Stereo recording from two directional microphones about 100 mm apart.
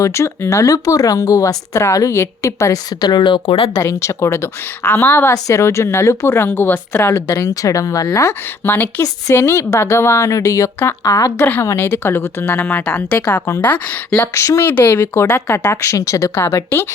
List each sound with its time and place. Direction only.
0.0 s speech: 30° left (ahead or behind)
3.0 s speech: 45° left (ahead or behind)
3.8 s a woman's voice: 30° left (ahead or behind)
5.3 s a woman's voice: 30° left (ahead or behind); by 13.4 s 15° left (ahead or behind)
14.2 s a woman's voice: 30° left (ahead or behind)
14.7 s a woman's voice: 20° left (ahead or behind)